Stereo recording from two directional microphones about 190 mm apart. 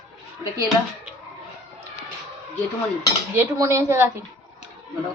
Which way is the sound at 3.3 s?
15° right (ahead or behind).